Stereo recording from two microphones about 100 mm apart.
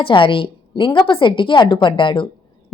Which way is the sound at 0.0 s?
60° left (ahead or behind).